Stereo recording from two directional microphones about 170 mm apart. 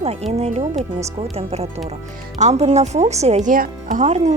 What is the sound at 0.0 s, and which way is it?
Speech, 40° right (ahead or behind).